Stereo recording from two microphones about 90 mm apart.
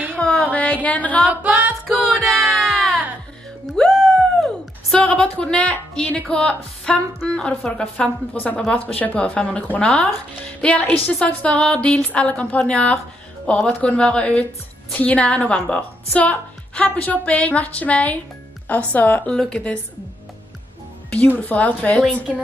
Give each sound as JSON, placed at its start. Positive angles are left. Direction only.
{"t": 0.1, "sound": "music", "side_deg": 10}
{"t": 0.8, "sound": "a woman's voice", "side_deg": 15}
{"t": 1.3, "sound": "singing", "side_deg": -15}
{"t": 1.9, "sound": "music", "side_deg": 0}
{"t": 3.6, "sound": "a sound", "side_deg": 5}
{"t": 4.9, "sound": "a woman's voice", "side_deg": 10}
{"t": 21.1, "sound": "a woman's voice", "side_deg": 15}